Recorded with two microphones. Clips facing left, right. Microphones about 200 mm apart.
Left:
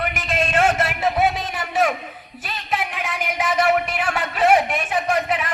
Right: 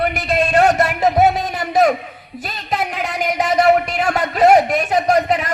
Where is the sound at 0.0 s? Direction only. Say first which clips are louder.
Right 6 dB; 40° right (ahead or behind).